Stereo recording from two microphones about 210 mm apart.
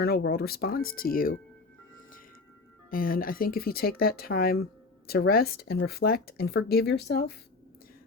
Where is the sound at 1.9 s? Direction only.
40° left (ahead or behind).